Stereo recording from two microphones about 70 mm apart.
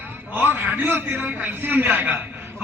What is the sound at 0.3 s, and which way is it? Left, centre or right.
A man's voice, right.